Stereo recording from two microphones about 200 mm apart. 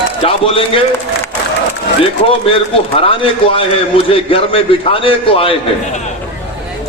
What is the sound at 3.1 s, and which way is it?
A man's voice, 25° left (ahead or behind).